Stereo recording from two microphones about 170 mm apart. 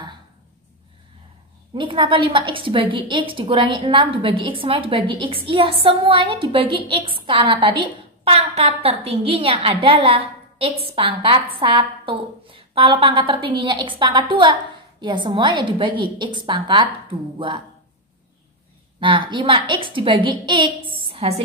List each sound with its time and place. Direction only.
1.8 s a woman's voice: 30° right (ahead or behind)
18.9 s a woman's voice: 30° right (ahead or behind)